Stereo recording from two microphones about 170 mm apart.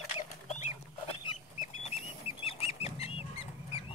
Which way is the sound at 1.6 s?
40° left (ahead or behind).